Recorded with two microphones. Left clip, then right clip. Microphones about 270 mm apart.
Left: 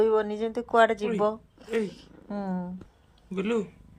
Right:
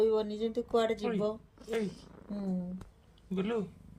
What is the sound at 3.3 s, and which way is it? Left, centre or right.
Speech, right.